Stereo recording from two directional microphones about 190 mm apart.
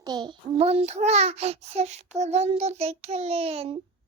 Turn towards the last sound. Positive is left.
turn(degrees=-30)  # may be behind; listen again after turning